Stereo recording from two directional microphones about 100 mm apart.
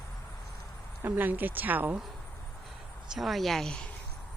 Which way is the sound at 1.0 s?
20° right (ahead or behind).